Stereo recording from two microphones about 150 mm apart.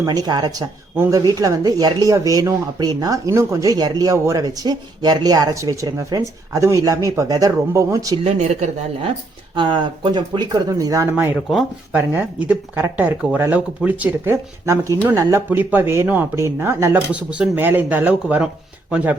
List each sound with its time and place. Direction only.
0.0 s speech: 25° right (ahead or behind)
8.2 s speech: 40° right (ahead or behind); by 11.3 s 15° right (ahead or behind)
11.4 s speech: centre (ahead or behind)
11.9 s speech: 10° right (ahead or behind)